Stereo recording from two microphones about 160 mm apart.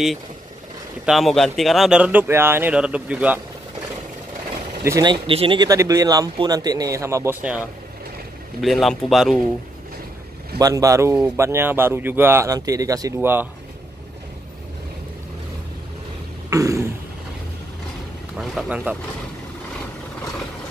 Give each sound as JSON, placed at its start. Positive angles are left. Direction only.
{"t": 1.0, "sound": "speech", "side_deg": 0}
{"t": 4.8, "sound": "speech", "side_deg": -25}
{"t": 8.5, "sound": "speech", "side_deg": 0}
{"t": 10.6, "sound": "speech", "side_deg": -20}
{"t": 16.4, "sound": "a sound", "side_deg": -20}
{"t": 18.4, "sound": "speech", "side_deg": 0}